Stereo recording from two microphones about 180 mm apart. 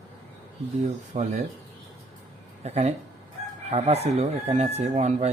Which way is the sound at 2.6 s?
35° right (ahead or behind).